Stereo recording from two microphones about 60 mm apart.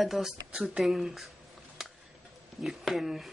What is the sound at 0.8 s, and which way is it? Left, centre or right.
Speech, centre.